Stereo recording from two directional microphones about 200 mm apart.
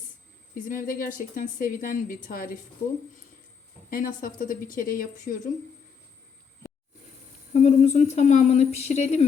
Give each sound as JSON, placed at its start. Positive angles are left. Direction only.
{"t": 0.7, "sound": "a woman's voice", "side_deg": 45}
{"t": 7.5, "sound": "speech", "side_deg": 35}